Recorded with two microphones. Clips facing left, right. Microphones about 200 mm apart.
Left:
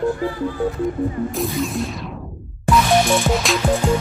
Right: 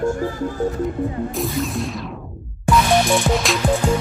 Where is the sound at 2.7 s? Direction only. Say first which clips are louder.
Even; centre (ahead or behind).